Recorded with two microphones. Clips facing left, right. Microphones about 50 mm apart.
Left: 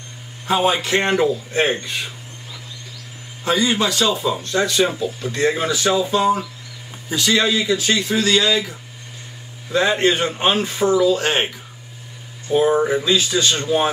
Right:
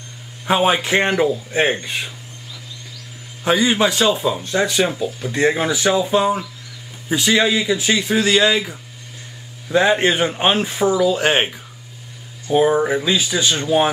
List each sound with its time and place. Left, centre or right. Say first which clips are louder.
0.5 s speech: right 2 dB; right
3.4 s speech: right 2 dB; right
12.7 s speech: even; centre